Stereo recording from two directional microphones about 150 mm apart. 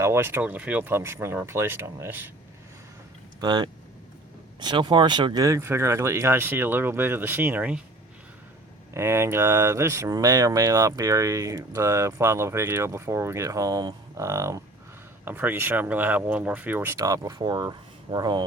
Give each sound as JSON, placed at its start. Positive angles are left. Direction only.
{"t": 0.0, "sound": "speech", "side_deg": -15}
{"t": 3.4, "sound": "speech", "side_deg": -30}
{"t": 8.9, "sound": "speech", "side_deg": -15}